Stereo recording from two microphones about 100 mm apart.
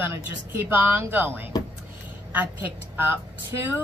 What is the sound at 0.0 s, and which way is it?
A woman's voice, 20° right (ahead or behind).